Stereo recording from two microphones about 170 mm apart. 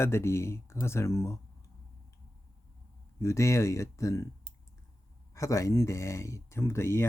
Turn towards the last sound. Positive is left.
turn(degrees=15)  # may be behind; listen again after turning